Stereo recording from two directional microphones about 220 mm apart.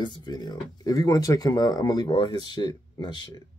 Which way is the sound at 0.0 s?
20° left (ahead or behind).